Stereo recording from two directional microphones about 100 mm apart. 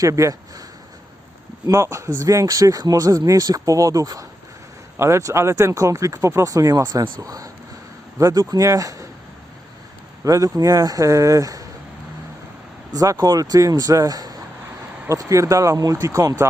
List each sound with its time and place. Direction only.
0.0 s speech: 35° right (ahead or behind)
1.6 s speech: 30° right (ahead or behind)
10.2 s speech: 35° right (ahead or behind)
12.9 s speech: 35° right (ahead or behind)